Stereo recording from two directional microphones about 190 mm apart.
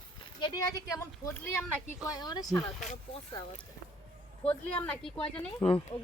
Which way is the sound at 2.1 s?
20° left (ahead or behind).